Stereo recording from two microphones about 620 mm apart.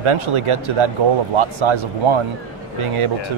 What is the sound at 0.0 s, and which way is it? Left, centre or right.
Speech, right.